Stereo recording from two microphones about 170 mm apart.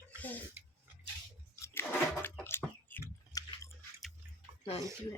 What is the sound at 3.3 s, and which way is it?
Chewing, 20° left (ahead or behind).